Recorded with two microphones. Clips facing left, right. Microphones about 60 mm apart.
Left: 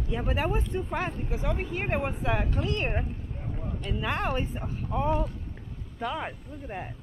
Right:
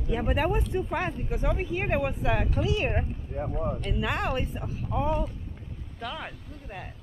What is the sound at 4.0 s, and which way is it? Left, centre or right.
A woman's voice, centre.